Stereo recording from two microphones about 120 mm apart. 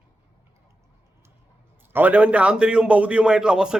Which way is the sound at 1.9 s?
15° right (ahead or behind).